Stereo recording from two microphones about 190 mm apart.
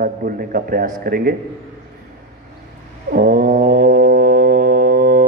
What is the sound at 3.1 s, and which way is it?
Mantra, 50° right (ahead or behind).